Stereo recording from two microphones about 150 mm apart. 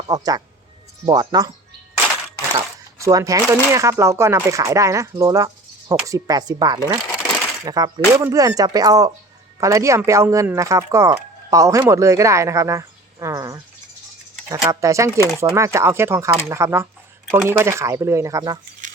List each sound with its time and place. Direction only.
0.1 s speech: 25° right (ahead or behind)
3.0 s speech: 20° right (ahead or behind)